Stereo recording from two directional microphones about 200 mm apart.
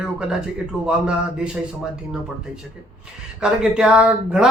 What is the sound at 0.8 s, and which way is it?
Speech, 5° right (ahead or behind).